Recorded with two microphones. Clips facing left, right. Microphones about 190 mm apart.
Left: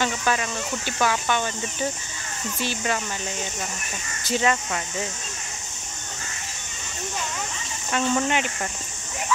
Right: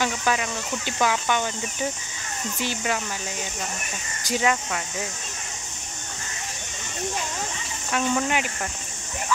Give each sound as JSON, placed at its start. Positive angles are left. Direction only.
{"t": 0.0, "sound": "speech", "side_deg": -10}
{"t": 4.2, "sound": "speech", "side_deg": -10}
{"t": 7.9, "sound": "speech", "side_deg": -5}